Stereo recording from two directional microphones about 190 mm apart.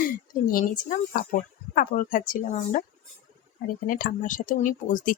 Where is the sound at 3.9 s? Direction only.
45° left (ahead or behind).